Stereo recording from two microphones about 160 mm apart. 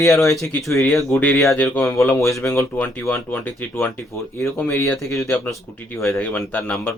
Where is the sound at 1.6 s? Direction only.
5° left (ahead or behind).